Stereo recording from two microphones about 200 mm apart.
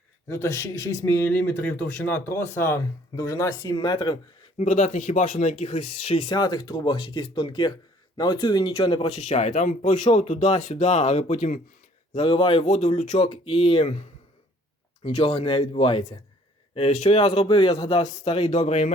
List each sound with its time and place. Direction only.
0.3 s speech: 15° left (ahead or behind)
4.5 s speech: 35° left (ahead or behind)
15.0 s speech: 30° left (ahead or behind)